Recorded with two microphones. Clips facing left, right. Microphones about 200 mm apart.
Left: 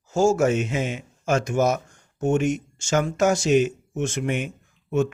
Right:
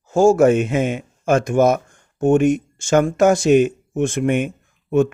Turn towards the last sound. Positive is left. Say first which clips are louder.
# right 6 dB
turn(degrees=-55)  # may be behind; listen again after turning